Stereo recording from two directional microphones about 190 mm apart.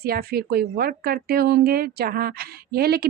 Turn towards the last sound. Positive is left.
turn(degrees=-55)  # may be behind; listen again after turning